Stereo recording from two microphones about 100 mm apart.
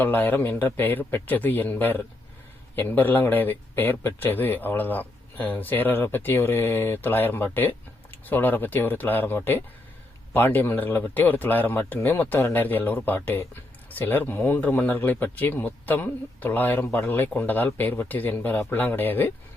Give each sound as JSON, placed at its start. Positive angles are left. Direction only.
{"t": 0.0, "sound": "speech", "side_deg": 20}